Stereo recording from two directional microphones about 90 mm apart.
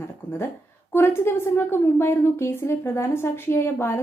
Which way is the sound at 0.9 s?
25° left (ahead or behind).